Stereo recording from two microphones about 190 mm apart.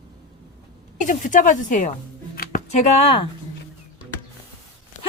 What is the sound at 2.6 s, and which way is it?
Speech, 35° left (ahead or behind).